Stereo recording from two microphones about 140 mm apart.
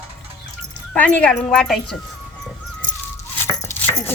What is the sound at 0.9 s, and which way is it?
A child's voice, 10° left (ahead or behind).